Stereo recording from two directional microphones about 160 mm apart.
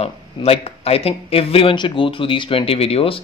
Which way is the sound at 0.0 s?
40° left (ahead or behind).